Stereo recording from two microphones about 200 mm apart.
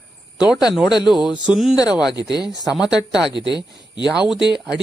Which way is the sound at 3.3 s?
20° left (ahead or behind).